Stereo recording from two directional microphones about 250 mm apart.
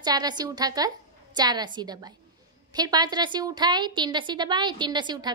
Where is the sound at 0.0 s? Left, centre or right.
Centre.